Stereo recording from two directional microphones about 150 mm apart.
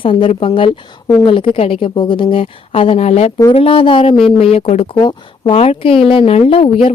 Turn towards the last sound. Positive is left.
turn(degrees=40)  # may be behind; listen again after turning